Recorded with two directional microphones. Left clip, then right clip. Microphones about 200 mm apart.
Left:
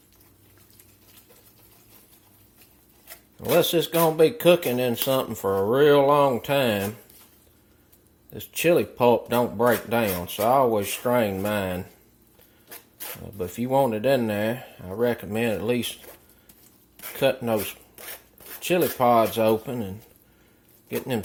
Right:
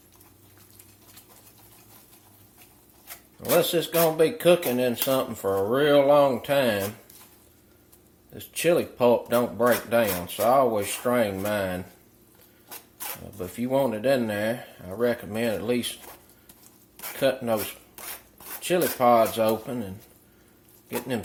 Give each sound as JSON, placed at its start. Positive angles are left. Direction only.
{"t": 3.5, "sound": "speech", "side_deg": 40}
{"t": 8.4, "sound": "speech", "side_deg": 40}
{"t": 13.4, "sound": "speech", "side_deg": 40}
{"t": 17.2, "sound": "speech", "side_deg": 40}
{"t": 17.9, "sound": "filing", "side_deg": -5}
{"t": 18.6, "sound": "speech", "side_deg": 40}